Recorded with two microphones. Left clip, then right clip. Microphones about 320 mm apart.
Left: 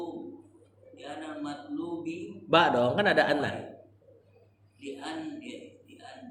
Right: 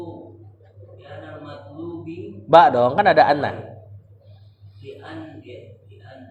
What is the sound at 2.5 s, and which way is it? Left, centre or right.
Speech, centre.